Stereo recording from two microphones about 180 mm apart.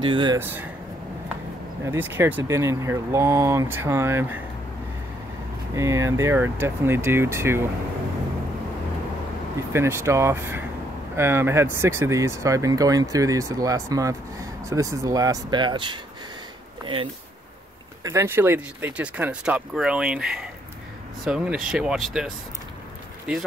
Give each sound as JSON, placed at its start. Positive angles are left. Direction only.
{"t": 0.0, "sound": "speech", "side_deg": -25}
{"t": 0.4, "sound": "speech", "side_deg": -10}
{"t": 1.9, "sound": "speech", "side_deg": -10}
{"t": 5.8, "sound": "speech", "side_deg": -15}
{"t": 9.7, "sound": "speech", "side_deg": -15}
{"t": 18.0, "sound": "speech", "side_deg": -15}